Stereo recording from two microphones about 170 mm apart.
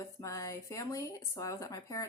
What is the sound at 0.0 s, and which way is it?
Speech, 20° left (ahead or behind).